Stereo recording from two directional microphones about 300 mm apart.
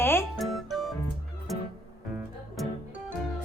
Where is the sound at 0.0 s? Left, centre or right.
Centre.